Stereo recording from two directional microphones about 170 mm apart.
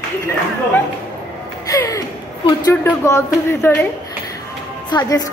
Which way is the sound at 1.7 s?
20° left (ahead or behind).